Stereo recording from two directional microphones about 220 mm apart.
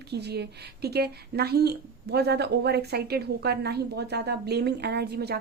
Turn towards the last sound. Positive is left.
turn(degrees=-45)  # may be behind; listen again after turning